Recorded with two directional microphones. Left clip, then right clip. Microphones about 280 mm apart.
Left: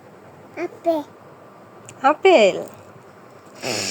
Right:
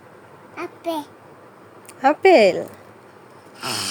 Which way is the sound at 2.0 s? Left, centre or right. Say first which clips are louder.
Even; centre.